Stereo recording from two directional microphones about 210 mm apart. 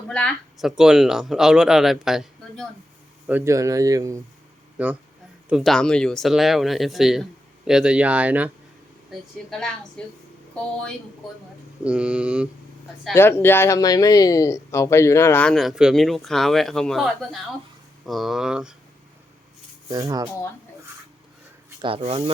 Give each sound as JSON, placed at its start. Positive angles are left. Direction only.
{"t": 0.1, "sound": "speech", "side_deg": 5}
{"t": 11.8, "sound": "speech", "side_deg": -5}
{"t": 13.1, "sound": "speech", "side_deg": 10}
{"t": 19.9, "sound": "speech", "side_deg": -20}
{"t": 21.8, "sound": "speech", "side_deg": -25}